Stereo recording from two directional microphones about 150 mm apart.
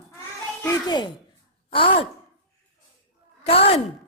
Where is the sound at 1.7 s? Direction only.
35° left (ahead or behind).